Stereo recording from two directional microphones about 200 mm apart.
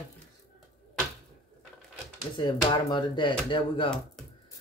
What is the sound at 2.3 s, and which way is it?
Speech, 20° left (ahead or behind).